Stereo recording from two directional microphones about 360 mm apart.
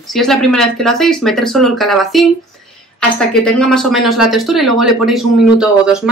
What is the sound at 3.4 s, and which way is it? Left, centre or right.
Speech, centre.